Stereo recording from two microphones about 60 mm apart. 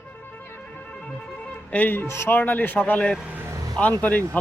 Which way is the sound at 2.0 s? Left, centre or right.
Left.